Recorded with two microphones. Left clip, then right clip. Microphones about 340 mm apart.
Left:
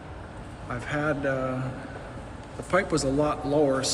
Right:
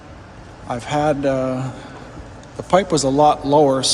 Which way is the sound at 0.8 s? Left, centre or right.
Centre.